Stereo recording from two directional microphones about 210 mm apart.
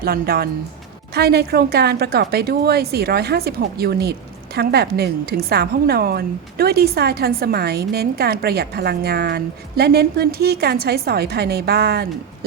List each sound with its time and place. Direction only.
0.0 s a woman's voice: 45° right (ahead or behind)